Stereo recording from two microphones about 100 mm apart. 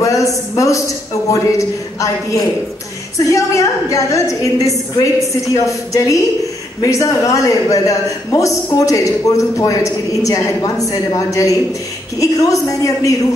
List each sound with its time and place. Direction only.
0.0 s a man's voice: 35° left (ahead or behind)